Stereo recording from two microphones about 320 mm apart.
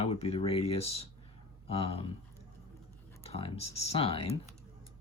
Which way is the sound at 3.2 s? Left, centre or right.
Centre.